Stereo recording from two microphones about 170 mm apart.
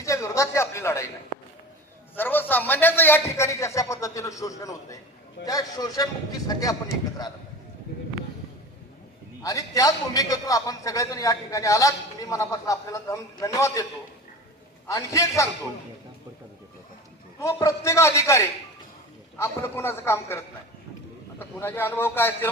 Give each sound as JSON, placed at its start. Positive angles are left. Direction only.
{"t": 0.0, "sound": "a sound", "side_deg": 20}
{"t": 2.1, "sound": "a man's voice", "side_deg": 10}
{"t": 9.4, "sound": "a man's voice", "side_deg": 20}
{"t": 14.8, "sound": "a man's voice", "side_deg": 20}
{"t": 17.4, "sound": "a man's voice", "side_deg": 20}